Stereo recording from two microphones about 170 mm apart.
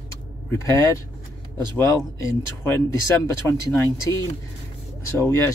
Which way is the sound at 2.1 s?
15° left (ahead or behind).